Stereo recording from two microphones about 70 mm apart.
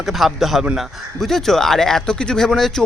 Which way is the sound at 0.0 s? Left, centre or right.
Centre.